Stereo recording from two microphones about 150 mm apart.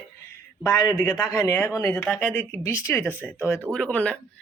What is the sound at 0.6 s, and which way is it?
A man's voice, 25° left (ahead or behind).